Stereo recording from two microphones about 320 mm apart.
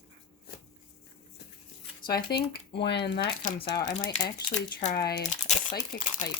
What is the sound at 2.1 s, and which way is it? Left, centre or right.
Speech, left.